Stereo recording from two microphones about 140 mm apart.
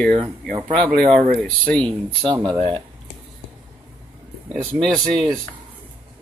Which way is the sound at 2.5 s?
40° right (ahead or behind).